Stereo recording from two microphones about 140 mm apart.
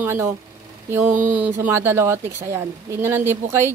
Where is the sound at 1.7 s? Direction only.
15° right (ahead or behind).